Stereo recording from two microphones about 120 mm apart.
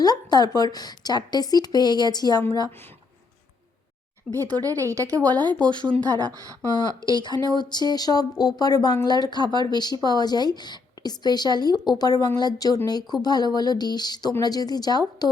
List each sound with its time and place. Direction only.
0.0 s a woman's voice: 35° left (ahead or behind)
4.5 s speech: 30° right (ahead or behind)
5.7 s speech: 40° right (ahead or behind)
6.7 s a woman's voice: 35° left (ahead or behind)